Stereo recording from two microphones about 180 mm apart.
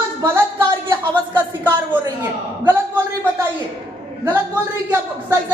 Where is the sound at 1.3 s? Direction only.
10° right (ahead or behind).